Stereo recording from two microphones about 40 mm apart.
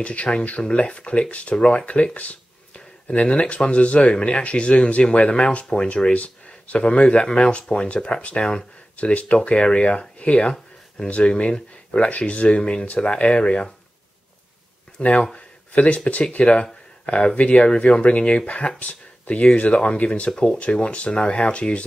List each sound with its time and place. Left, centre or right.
0.0 s speech: left
3.1 s speech: left
8.9 s speech: left
15.0 s speech: left
15.3 s a sound: left
16.4 s speech: left
17.6 s speech: centre
18.0 s speech: left
20.2 s speech: left
20.5 s speech: left